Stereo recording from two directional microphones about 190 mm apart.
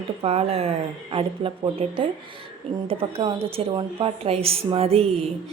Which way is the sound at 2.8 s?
30° right (ahead or behind).